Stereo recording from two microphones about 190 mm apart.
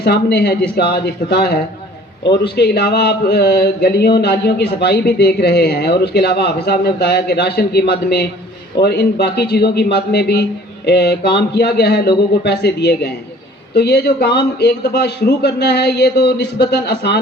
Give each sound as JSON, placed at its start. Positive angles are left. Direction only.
{"t": 0.0, "sound": "speech", "side_deg": 60}
{"t": 2.6, "sound": "speech", "side_deg": 60}